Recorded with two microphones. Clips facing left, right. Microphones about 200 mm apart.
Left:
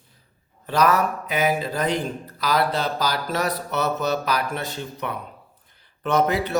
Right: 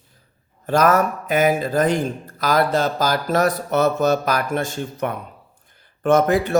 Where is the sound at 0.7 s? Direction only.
50° right (ahead or behind).